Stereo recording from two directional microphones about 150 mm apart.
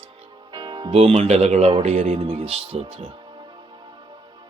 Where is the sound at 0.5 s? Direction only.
30° right (ahead or behind).